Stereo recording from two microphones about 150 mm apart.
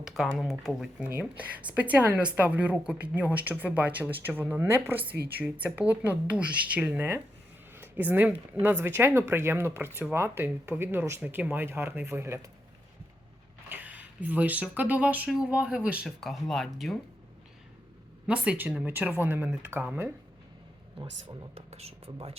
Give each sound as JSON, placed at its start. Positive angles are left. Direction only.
{"t": 0.0, "sound": "a sound", "side_deg": -5}
{"t": 0.3, "sound": "speech", "side_deg": 0}
{"t": 13.7, "sound": "speech", "side_deg": -10}
{"t": 18.3, "sound": "speech", "side_deg": -10}
{"t": 21.7, "sound": "speech", "side_deg": -45}